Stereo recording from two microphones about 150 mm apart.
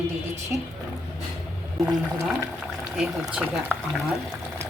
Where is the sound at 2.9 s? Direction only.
5° right (ahead or behind).